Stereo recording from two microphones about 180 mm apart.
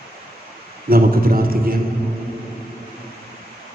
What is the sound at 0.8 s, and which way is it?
Speech, 55° right (ahead or behind).